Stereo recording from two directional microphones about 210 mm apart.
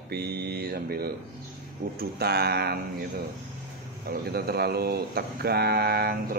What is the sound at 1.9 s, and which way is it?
Speech, 50° right (ahead or behind).